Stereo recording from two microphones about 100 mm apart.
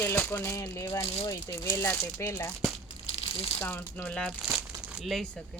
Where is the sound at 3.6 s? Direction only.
20° left (ahead or behind).